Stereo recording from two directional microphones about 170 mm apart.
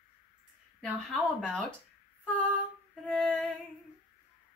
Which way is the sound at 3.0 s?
5° left (ahead or behind).